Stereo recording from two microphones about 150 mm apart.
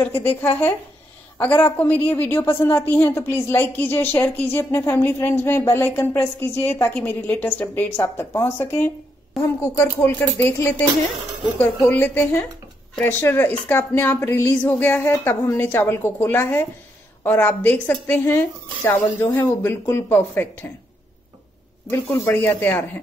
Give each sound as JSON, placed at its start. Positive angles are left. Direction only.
{"t": 0.2, "sound": "a woman's voice", "side_deg": 15}
{"t": 11.9, "sound": "a woman's voice", "side_deg": 15}
{"t": 21.9, "sound": "a woman's voice", "side_deg": 15}